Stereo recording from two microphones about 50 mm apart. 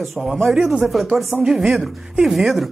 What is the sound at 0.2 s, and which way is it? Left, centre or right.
Speech, centre.